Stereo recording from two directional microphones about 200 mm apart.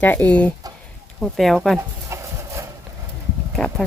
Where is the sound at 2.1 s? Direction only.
15° right (ahead or behind).